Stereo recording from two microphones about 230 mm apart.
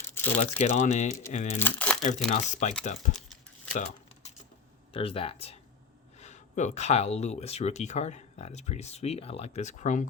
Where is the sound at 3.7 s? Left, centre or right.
Left.